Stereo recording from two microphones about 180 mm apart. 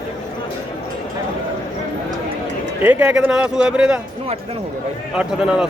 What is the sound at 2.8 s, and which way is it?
Speech, 10° right (ahead or behind).